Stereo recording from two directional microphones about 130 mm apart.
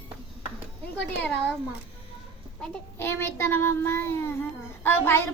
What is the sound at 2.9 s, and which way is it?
Child singing, 20° left (ahead or behind).